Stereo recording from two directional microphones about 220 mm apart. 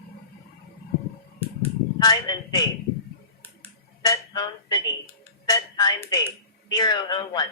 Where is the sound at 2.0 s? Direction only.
15° left (ahead or behind).